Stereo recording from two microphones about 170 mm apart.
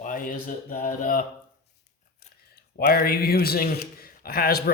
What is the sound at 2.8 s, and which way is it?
A man's voice, 60° left (ahead or behind).